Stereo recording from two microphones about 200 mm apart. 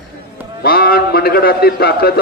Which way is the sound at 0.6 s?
50° left (ahead or behind).